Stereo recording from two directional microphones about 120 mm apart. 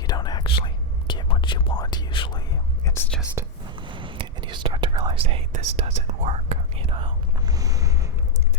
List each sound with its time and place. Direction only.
0.1 s whispering: 35° left (ahead or behind)
2.8 s whispering: 20° left (ahead or behind)
3.4 s whispering: 20° right (ahead or behind)
3.8 s whispering: 45° right (ahead or behind)
7.4 s a sound: 30° right (ahead or behind)